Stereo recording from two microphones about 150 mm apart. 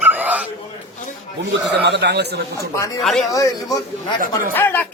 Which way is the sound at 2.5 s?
20° left (ahead or behind).